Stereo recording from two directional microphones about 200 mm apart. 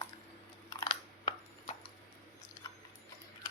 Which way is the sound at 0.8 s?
30° left (ahead or behind).